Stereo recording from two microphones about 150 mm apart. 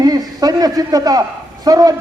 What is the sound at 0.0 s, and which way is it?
A man's voice, 25° right (ahead or behind).